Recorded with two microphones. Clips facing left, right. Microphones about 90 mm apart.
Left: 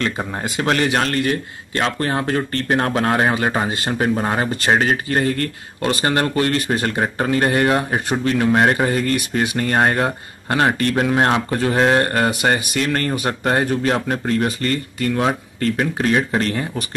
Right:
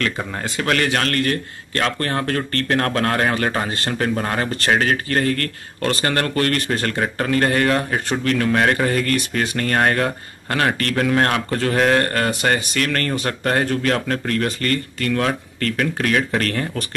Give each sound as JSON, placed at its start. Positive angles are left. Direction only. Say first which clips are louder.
{"t": 0.0, "sound": "a man's voice", "louder": "left 1 dB", "side_deg": 25}